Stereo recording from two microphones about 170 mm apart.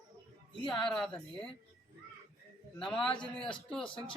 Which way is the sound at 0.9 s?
5° left (ahead or behind).